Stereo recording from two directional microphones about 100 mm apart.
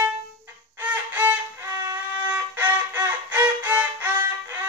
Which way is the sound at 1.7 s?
30° right (ahead or behind).